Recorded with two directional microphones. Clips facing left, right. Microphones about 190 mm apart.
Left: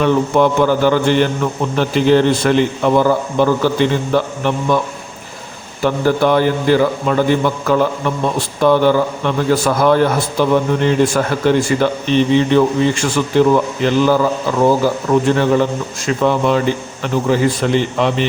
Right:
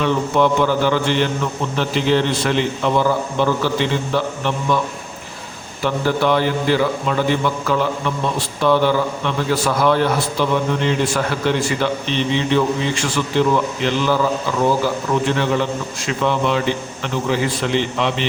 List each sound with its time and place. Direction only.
0.0 s a man's voice: 45° left (ahead or behind)
5.8 s a man's voice: 45° left (ahead or behind)
15.3 s a man's voice: 45° left (ahead or behind)